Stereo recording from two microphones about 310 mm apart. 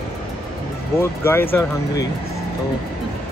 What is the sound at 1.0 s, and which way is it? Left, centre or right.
Speech, centre.